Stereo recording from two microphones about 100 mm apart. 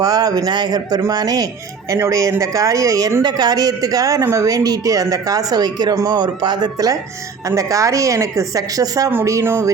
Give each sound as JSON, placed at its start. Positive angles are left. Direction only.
{"t": 0.0, "sound": "speech", "side_deg": -40}
{"t": 3.2, "sound": "speech", "side_deg": -40}